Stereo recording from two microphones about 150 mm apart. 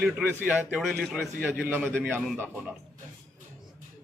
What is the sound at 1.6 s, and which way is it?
Speech, 15° right (ahead or behind).